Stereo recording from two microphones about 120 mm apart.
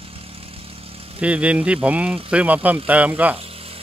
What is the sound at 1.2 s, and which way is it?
Speech, 10° right (ahead or behind).